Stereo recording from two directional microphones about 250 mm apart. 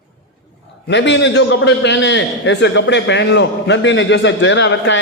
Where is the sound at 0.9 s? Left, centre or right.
Left.